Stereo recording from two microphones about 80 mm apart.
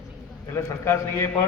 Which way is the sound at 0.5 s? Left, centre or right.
Left.